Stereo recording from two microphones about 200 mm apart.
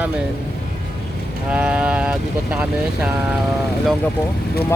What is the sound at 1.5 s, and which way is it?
Speech, 5° right (ahead or behind).